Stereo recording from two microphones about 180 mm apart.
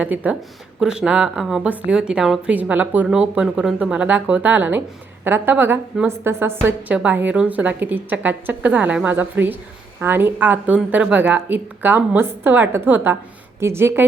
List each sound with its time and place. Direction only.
0.0 s a woman's voice: 10° right (ahead or behind)